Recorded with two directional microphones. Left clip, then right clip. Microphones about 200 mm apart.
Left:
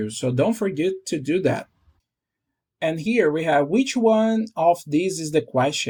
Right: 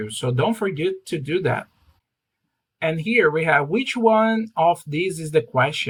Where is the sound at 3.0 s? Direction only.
30° left (ahead or behind).